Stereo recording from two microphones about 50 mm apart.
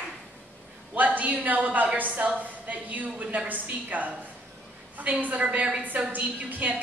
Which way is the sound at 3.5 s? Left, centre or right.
Right.